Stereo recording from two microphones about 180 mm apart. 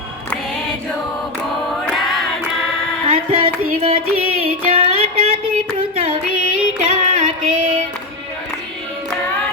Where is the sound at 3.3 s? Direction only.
30° right (ahead or behind).